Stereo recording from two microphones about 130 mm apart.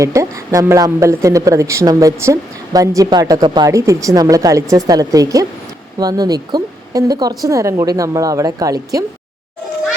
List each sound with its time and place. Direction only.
0.0 s speech: 25° right (ahead or behind)
3.7 s speech: 25° right (ahead or behind)